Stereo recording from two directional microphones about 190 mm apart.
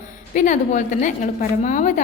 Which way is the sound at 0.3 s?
40° left (ahead or behind).